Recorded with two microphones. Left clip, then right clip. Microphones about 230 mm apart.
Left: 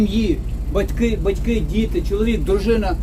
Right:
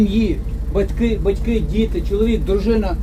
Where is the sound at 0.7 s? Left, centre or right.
Left.